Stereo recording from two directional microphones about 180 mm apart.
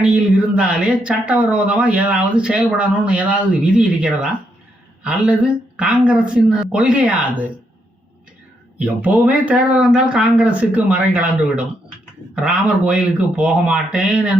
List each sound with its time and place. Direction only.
0.5 s speech: 5° right (ahead or behind)
8.8 s speech: 10° right (ahead or behind)